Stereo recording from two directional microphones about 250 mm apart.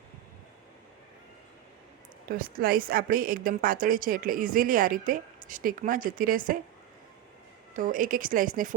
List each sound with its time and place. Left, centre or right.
2.3 s a woman's voice: right
7.7 s a woman's voice: right